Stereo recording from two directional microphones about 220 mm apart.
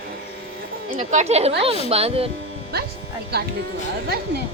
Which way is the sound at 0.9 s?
30° right (ahead or behind).